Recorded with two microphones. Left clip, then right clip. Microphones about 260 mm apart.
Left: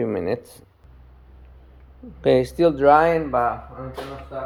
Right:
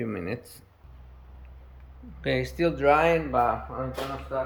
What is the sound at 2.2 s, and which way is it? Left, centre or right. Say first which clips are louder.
Speech: left 9 dB; centre.